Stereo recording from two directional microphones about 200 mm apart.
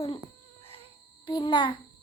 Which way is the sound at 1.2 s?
20° left (ahead or behind).